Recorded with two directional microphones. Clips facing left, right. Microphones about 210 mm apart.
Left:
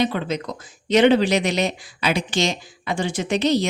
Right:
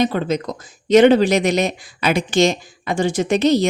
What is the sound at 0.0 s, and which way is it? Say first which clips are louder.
Speech: right 4 dB; 45° right (ahead or behind).